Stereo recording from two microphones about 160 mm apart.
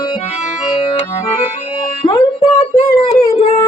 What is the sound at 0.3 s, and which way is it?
Accordion, 35° left (ahead or behind).